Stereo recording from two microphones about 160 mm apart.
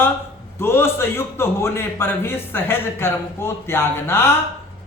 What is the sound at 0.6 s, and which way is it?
A woman's voice, 15° left (ahead or behind).